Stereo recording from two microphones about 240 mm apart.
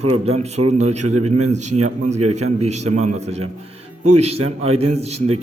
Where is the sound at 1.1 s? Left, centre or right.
Right.